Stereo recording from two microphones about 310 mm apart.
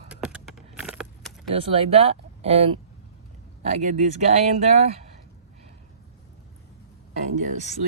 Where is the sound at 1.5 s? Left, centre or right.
Centre.